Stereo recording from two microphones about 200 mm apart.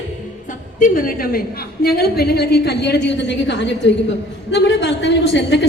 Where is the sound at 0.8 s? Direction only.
45° left (ahead or behind).